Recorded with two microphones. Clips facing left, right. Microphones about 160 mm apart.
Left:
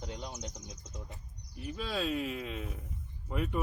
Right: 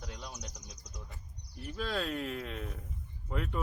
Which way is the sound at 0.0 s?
20° left (ahead or behind).